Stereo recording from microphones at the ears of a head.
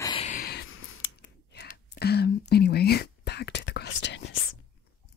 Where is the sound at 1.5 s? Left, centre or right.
Left.